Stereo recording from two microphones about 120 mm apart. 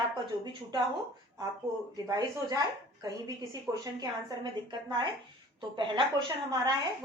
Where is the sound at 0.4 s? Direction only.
40° right (ahead or behind).